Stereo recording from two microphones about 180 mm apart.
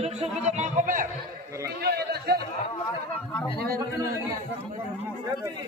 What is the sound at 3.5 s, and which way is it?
Speech, 60° right (ahead or behind).